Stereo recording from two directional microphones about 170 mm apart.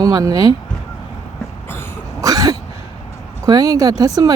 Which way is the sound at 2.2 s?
20° right (ahead or behind).